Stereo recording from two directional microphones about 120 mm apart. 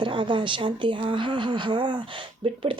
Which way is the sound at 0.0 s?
45° right (ahead or behind).